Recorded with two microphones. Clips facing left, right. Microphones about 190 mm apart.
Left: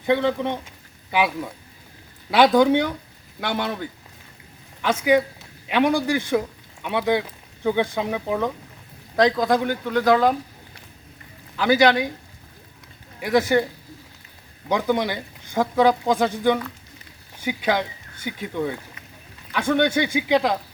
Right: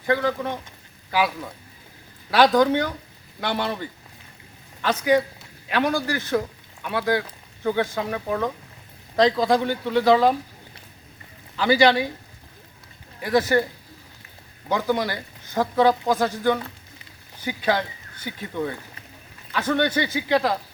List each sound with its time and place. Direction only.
0.0 s speech: 20° left (ahead or behind)
2.3 s speech: 15° left (ahead or behind)
3.4 s speech: 5° left (ahead or behind)
9.1 s speech: centre (ahead or behind)
11.5 s speech: centre (ahead or behind)
13.1 s speech: 10° left (ahead or behind)
14.7 s speech: 15° left (ahead or behind)